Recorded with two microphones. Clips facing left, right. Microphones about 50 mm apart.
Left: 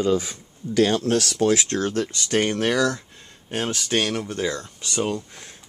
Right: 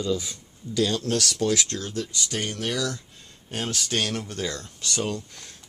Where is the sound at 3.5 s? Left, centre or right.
Centre.